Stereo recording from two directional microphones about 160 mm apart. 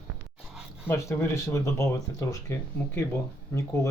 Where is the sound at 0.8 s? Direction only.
15° left (ahead or behind).